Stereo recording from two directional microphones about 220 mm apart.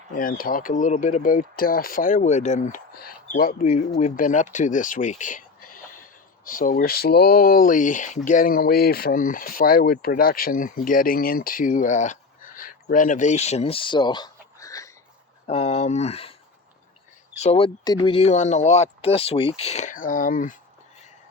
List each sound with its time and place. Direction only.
0.2 s speech: 40° left (ahead or behind); by 14.9 s 15° left (ahead or behind)
15.4 s speech: 30° left (ahead or behind)
17.3 s speech: 30° left (ahead or behind)